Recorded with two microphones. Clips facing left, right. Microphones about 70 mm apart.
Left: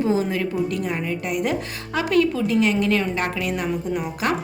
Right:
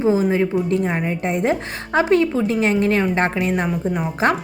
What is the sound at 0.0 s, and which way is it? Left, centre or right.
A woman's voice, right.